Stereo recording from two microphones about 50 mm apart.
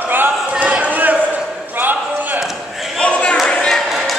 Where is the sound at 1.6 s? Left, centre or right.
Right.